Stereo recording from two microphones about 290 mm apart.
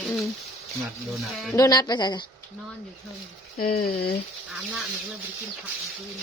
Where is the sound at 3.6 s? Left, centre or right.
Left.